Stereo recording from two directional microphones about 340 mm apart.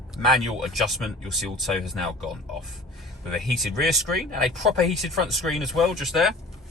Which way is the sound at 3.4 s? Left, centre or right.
Centre.